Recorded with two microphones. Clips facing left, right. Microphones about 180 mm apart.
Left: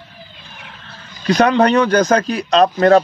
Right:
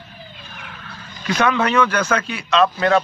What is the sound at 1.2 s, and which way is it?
Speech, 35° left (ahead or behind).